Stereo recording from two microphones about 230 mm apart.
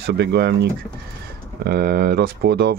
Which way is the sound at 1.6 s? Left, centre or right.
Right.